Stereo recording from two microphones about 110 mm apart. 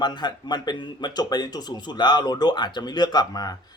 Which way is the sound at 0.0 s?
40° left (ahead or behind).